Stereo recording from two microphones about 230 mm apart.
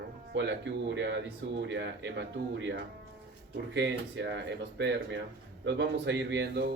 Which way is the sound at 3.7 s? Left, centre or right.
Right.